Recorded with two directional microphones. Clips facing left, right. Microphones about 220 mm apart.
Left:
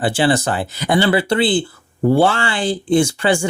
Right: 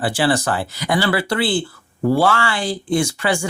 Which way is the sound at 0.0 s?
25° left (ahead or behind).